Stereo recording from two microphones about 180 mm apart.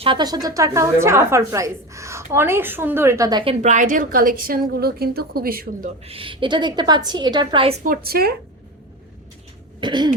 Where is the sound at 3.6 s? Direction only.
45° right (ahead or behind).